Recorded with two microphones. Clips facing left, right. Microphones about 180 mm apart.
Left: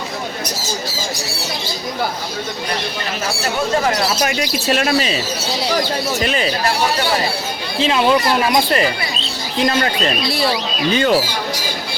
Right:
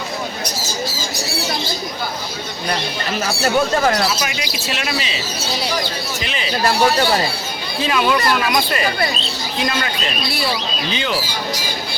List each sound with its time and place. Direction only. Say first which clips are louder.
4.2 s speech: left 6 dB; 45° left (ahead or behind)
6.2 s speech: left 9 dB; 45° left (ahead or behind)
7.8 s speech: left 3 dB; 25° left (ahead or behind)
9.6 s speech: left 6 dB; 40° left (ahead or behind)